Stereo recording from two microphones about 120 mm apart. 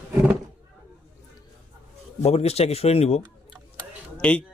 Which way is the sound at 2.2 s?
60° left (ahead or behind).